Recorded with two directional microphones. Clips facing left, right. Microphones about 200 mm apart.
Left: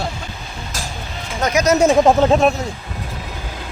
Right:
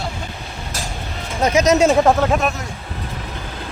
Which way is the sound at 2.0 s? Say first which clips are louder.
Left 3 dB; 25° left (ahead or behind).